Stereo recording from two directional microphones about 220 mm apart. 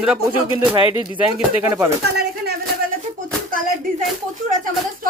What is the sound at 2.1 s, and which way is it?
Speech, 45° right (ahead or behind).